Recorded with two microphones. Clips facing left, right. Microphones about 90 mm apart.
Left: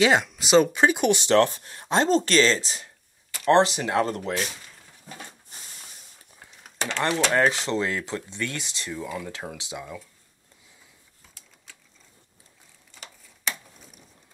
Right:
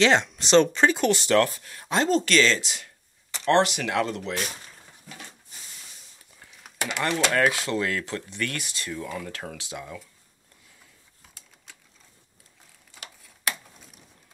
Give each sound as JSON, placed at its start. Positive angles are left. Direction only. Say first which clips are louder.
{"t": 0.0, "sound": "speech", "louder": "even", "side_deg": 5}
{"t": 7.0, "sound": "speech", "louder": "left 1 dB", "side_deg": 25}
{"t": 12.9, "sound": "tick-tock", "louder": "right 1 dB", "side_deg": -5}